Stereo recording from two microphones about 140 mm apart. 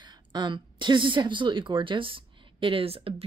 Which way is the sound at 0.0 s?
30° right (ahead or behind).